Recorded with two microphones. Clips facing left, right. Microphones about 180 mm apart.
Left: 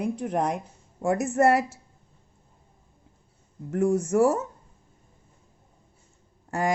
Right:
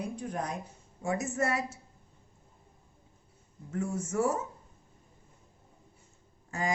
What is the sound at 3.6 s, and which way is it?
Speech, 70° left (ahead or behind).